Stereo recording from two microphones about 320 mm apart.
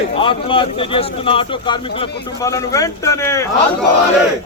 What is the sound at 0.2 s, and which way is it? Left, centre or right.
Speech, centre.